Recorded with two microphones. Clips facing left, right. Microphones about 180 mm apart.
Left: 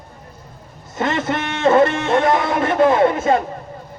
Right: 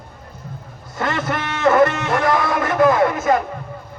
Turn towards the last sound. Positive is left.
turn(degrees=25)  # may be behind; listen again after turning